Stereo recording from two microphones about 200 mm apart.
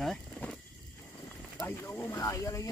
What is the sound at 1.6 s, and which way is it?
Speech, 15° left (ahead or behind).